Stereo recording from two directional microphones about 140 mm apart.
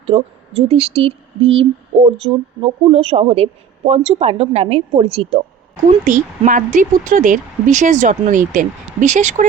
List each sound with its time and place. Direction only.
0.0 s speech: 45° right (ahead or behind)
6.1 s speech: 65° right (ahead or behind)